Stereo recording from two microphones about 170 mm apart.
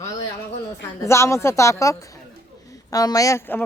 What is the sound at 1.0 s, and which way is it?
Speech, 15° left (ahead or behind).